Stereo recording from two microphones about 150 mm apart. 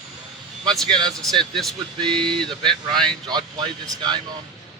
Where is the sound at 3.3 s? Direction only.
30° right (ahead or behind).